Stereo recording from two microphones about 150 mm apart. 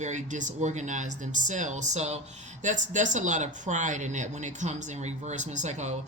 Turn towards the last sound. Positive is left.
turn(degrees=-50)  # may be behind; listen again after turning